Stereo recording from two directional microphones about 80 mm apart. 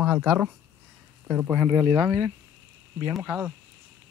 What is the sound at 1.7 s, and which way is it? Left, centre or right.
Speech, right.